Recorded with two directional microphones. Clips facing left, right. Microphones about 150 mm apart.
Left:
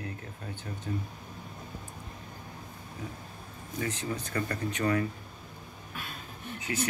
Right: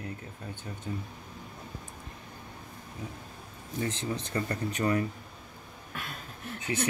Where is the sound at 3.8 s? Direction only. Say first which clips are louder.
Right 1 dB; 30° right (ahead or behind).